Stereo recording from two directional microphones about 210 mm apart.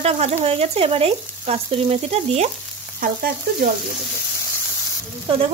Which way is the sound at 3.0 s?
45° right (ahead or behind).